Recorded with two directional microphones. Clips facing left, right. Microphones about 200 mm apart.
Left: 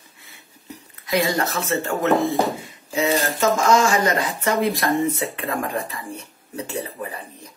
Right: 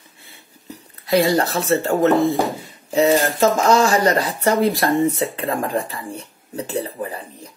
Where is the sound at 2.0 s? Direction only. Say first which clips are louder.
Right 2 dB; centre (ahead or behind).